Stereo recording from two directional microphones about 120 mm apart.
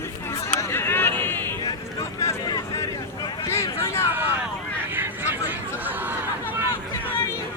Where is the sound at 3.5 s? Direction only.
25° left (ahead or behind).